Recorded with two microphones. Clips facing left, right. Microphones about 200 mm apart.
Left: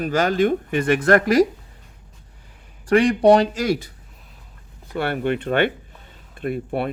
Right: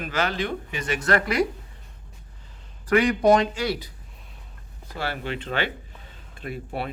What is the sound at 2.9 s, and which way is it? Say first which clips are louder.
Speech: left 4 dB; 30° left (ahead or behind).